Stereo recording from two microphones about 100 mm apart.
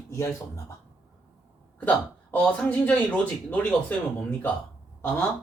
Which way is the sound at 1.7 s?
15° left (ahead or behind).